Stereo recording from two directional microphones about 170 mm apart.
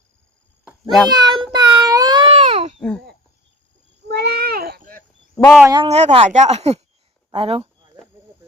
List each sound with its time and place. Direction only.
0.6 s cat: centre (ahead or behind)
1.2 s child singing: 25° right (ahead or behind)
1.5 s a sound: 25° right (ahead or behind)
2.7 s a child's voice: 5° left (ahead or behind)
4.1 s a sound: 70° right (ahead or behind)
5.3 s speech: 5° left (ahead or behind)
5.6 s speech: 25° right (ahead or behind)
5.9 s speech: 35° right (ahead or behind)